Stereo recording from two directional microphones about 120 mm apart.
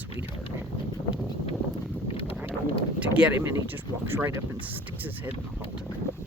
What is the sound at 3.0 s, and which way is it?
Speech, 10° right (ahead or behind).